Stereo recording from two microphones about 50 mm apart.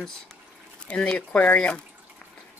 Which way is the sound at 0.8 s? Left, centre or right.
Left.